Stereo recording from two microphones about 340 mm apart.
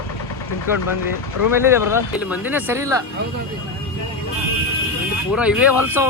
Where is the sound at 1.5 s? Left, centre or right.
Centre.